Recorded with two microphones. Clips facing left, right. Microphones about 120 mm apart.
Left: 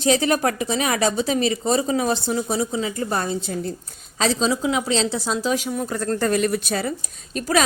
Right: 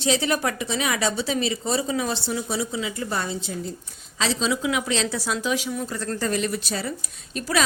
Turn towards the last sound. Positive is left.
turn(degrees=45)  # may be behind; listen again after turning